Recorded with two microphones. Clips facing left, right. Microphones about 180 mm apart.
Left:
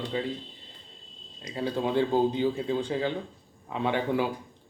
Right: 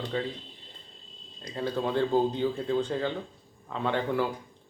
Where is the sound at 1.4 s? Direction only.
10° left (ahead or behind).